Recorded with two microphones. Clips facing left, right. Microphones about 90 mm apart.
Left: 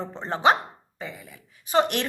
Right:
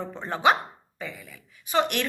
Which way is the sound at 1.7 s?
35° left (ahead or behind).